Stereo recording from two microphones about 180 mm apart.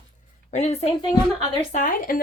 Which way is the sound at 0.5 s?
35° left (ahead or behind).